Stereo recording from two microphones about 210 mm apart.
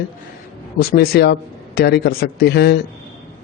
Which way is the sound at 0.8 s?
50° left (ahead or behind).